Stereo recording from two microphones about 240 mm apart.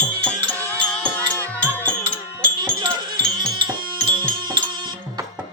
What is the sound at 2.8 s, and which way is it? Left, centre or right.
Music, centre.